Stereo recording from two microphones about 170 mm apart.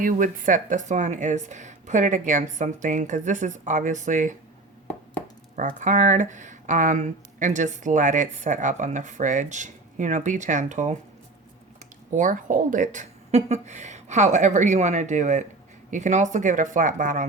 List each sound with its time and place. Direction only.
0.0 s speech: 50° right (ahead or behind)
5.5 s speech: 50° right (ahead or behind)
12.1 s speech: 50° right (ahead or behind)